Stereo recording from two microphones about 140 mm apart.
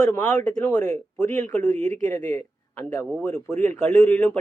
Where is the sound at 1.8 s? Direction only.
55° right (ahead or behind).